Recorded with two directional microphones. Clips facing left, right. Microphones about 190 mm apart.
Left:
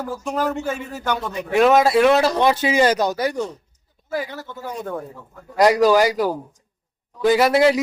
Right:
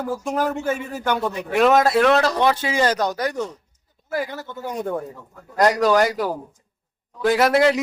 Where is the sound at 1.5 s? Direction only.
Centre (ahead or behind).